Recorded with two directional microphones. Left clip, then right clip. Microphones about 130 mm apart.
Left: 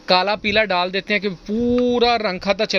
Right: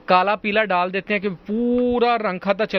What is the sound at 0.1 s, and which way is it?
Speech, 25° left (ahead or behind).